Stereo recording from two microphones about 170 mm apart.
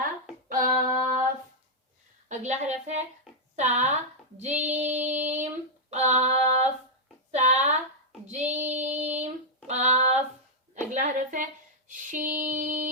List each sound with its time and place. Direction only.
0.0 s hands: 55° right (ahead or behind)
2.3 s female singing: 45° right (ahead or behind)
3.5 s speech: 40° right (ahead or behind)
4.4 s female singing: 45° right (ahead or behind)
7.3 s a sound: 40° right (ahead or behind)
8.3 s female singing: 40° right (ahead or behind)
9.6 s a sound: 40° right (ahead or behind)
10.8 s female singing: 45° right (ahead or behind)
11.9 s a sound: 50° right (ahead or behind)
12.5 s female singing: 50° right (ahead or behind)